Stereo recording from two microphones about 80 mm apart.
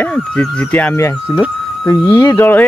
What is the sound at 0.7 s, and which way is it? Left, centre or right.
Speech, centre.